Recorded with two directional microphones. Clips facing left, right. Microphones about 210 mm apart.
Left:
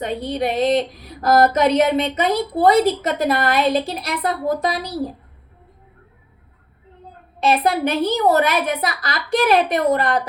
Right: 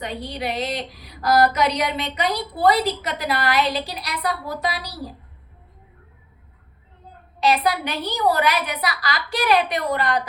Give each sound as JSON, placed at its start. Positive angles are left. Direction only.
{"t": 0.0, "sound": "a woman's voice", "side_deg": 45}
{"t": 7.3, "sound": "a woman's voice", "side_deg": 50}